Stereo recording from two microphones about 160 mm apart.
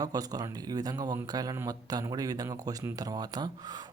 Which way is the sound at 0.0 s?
25° right (ahead or behind).